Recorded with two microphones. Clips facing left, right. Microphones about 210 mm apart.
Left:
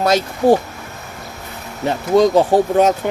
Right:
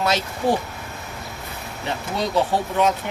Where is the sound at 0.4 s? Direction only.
45° left (ahead or behind).